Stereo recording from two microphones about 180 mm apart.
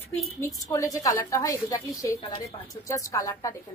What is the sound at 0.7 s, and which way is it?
A woman's voice, 20° left (ahead or behind).